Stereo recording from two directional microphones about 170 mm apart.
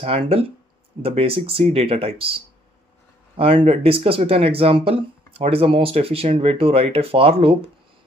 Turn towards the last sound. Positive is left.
turn(degrees=-35)  # may be behind; listen again after turning